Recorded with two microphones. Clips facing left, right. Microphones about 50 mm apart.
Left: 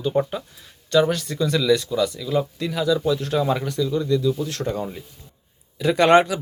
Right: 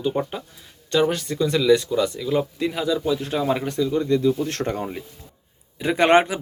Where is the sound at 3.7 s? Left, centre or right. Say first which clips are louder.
Right 1 dB; right.